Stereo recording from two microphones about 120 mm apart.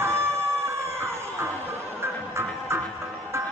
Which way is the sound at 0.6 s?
20° right (ahead or behind).